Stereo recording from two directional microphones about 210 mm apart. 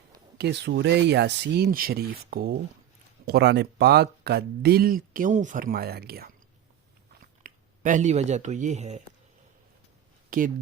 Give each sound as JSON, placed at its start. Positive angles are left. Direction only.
{"t": 0.3, "sound": "speech", "side_deg": -50}
{"t": 7.4, "sound": "speech", "side_deg": -35}
{"t": 10.2, "sound": "speech", "side_deg": -40}